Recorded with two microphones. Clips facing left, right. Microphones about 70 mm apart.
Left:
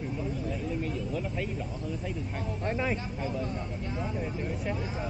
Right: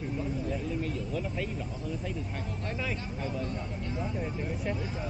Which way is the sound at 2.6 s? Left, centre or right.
Left.